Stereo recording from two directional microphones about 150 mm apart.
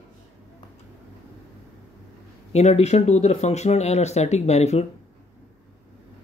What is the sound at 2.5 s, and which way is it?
Speech, 45° left (ahead or behind).